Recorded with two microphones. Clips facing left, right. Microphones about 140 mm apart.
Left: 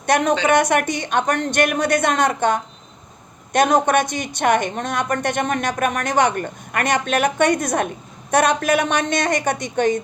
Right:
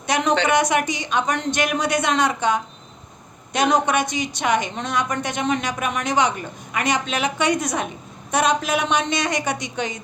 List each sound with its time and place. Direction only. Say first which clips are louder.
0.0 s a woman's voice: left 2 dB; 55° left (ahead or behind)